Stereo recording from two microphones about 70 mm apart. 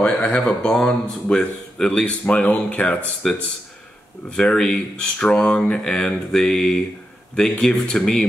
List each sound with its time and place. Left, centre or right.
0.0 s a man's voice: centre
4.4 s a man's voice: centre